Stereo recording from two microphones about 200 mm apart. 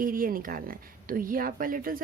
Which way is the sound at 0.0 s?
45° right (ahead or behind).